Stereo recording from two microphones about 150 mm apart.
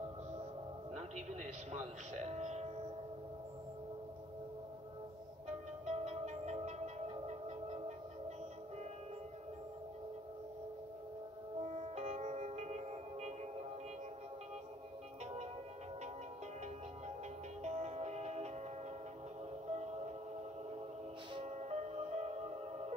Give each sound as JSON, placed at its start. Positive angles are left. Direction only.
{"t": 0.9, "sound": "music", "side_deg": -50}
{"t": 5.9, "sound": "music", "side_deg": -45}
{"t": 11.6, "sound": "music", "side_deg": -45}
{"t": 17.6, "sound": "music", "side_deg": -45}
{"t": 19.7, "sound": "music", "side_deg": -45}
{"t": 21.3, "sound": "music", "side_deg": -40}